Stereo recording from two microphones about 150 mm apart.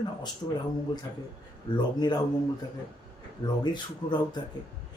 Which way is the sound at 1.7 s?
30° left (ahead or behind).